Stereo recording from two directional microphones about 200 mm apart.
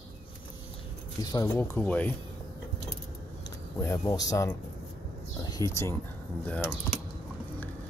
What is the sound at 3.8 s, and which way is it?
Speech, 15° left (ahead or behind).